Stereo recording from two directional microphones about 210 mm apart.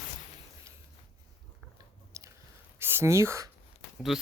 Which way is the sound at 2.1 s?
15° right (ahead or behind).